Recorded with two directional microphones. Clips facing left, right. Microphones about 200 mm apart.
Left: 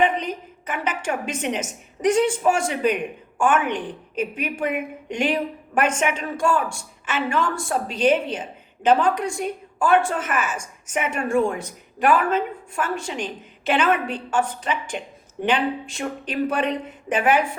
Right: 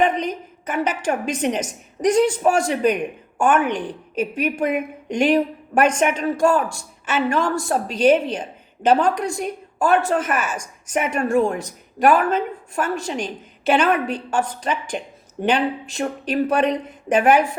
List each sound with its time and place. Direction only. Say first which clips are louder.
0.0 s a woman's voice: right 2 dB; 40° right (ahead or behind)